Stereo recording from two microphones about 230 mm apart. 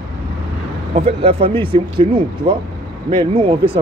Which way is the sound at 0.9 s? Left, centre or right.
Right.